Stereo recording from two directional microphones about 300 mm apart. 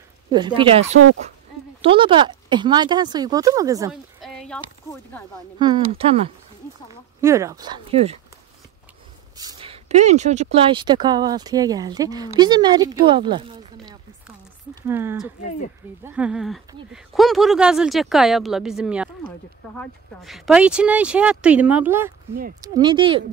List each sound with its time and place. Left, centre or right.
0.3 s speech: centre
3.9 s a sound: centre
5.6 s speech: centre
9.4 s speech: centre